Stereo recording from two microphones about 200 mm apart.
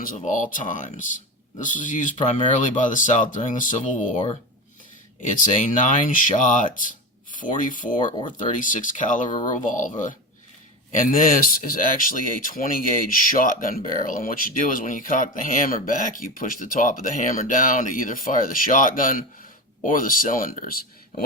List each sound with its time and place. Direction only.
0.0 s speech: 40° left (ahead or behind)
5.2 s speech: 40° left (ahead or behind)
10.9 s speech: 40° left (ahead or behind)